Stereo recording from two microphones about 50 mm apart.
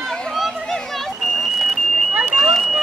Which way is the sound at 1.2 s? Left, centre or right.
Centre.